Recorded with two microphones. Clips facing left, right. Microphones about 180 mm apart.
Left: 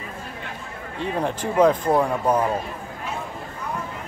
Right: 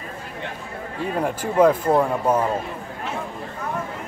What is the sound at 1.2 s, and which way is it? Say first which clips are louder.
Speech: right 1 dB; 5° right (ahead or behind).